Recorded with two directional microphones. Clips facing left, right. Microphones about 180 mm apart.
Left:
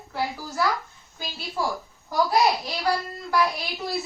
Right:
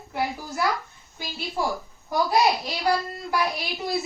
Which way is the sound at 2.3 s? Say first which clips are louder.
Right 1 dB; 20° right (ahead or behind).